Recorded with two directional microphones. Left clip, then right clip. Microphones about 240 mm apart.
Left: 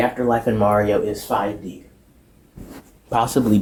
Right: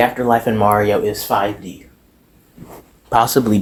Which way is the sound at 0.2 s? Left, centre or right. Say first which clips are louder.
Right 4 dB; right.